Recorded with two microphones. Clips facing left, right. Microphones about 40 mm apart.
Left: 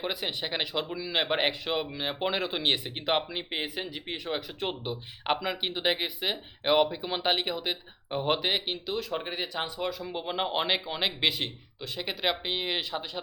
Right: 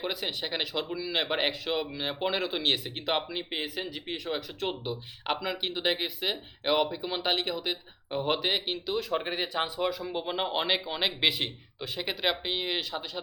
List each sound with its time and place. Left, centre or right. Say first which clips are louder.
0.0 s speech: even; centre